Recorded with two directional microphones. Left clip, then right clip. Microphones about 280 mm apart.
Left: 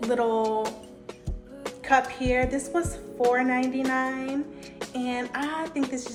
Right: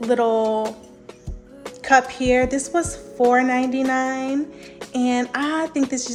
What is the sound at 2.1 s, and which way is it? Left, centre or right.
Speech, right.